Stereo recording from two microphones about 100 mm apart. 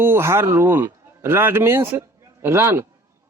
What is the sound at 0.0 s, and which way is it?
Speech, 25° right (ahead or behind).